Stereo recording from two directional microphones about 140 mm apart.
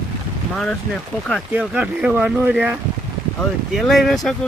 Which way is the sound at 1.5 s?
10° right (ahead or behind).